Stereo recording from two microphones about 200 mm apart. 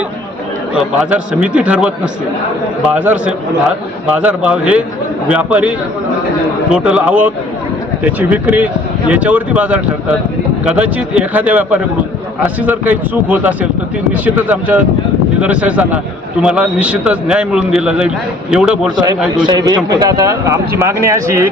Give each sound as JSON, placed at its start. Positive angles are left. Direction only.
{"t": 0.9, "sound": "a man's voice", "side_deg": -5}
{"t": 19.5, "sound": "speech", "side_deg": -20}